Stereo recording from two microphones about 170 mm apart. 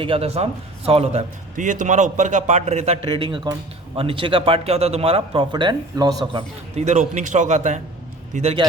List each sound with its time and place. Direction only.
0.0 s a man's voice: 35° right (ahead or behind)
6.3 s a man's voice: 40° right (ahead or behind)